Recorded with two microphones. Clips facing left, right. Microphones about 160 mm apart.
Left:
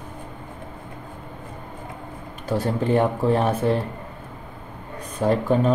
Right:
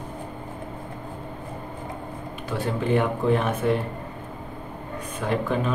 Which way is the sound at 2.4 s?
40° left (ahead or behind).